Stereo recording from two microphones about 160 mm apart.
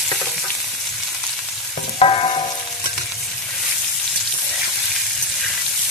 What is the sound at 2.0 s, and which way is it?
Frying, 40° left (ahead or behind).